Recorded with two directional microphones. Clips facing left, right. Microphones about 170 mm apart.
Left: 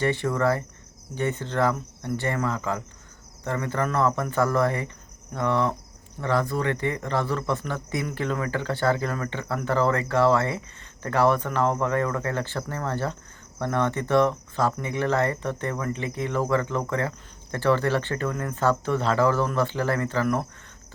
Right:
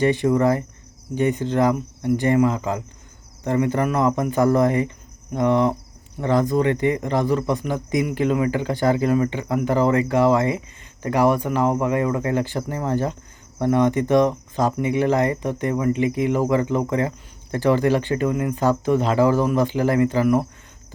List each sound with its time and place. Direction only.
0.0 s speech: 15° right (ahead or behind)